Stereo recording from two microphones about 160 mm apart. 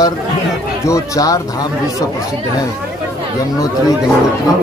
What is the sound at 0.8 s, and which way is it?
Speech, 20° left (ahead or behind).